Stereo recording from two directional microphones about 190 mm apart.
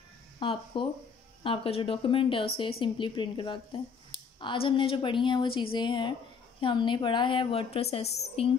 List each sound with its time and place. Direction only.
0.4 s a woman's voice: 25° left (ahead or behind)